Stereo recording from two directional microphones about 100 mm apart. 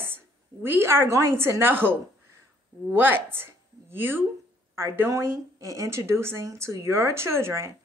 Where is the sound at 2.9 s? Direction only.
20° right (ahead or behind).